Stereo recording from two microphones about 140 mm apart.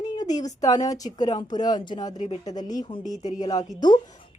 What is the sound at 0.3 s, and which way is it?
Speech, 25° left (ahead or behind).